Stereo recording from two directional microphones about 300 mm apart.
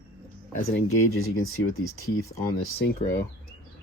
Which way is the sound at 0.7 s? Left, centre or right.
Left.